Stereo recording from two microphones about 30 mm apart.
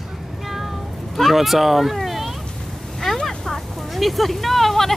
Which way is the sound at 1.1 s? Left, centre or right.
Centre.